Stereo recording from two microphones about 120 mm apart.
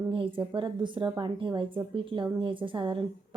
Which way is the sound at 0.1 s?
45° right (ahead or behind).